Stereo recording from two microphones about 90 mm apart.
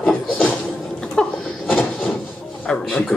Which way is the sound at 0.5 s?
10° left (ahead or behind).